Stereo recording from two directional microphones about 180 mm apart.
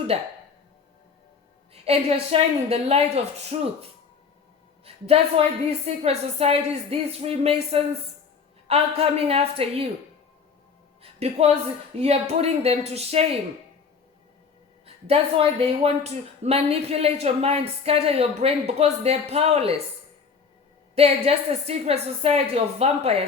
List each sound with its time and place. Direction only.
0.1 s speech: 35° right (ahead or behind)
1.7 s speech: 35° right (ahead or behind)
5.0 s speech: 35° right (ahead or behind)
11.0 s speech: 35° right (ahead or behind)
14.8 s speech: 35° right (ahead or behind)
20.9 s speech: 35° right (ahead or behind)